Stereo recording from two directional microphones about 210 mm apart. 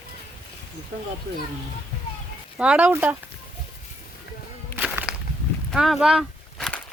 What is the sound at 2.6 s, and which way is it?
Speech, 5° right (ahead or behind).